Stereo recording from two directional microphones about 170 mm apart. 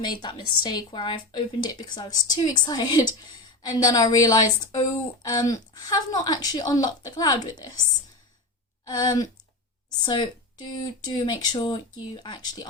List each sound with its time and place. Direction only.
0.0 s a woman's voice: 25° left (ahead or behind)
8.9 s a woman's voice: 20° left (ahead or behind)